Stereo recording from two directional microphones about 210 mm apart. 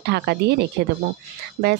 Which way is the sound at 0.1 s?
50° right (ahead or behind).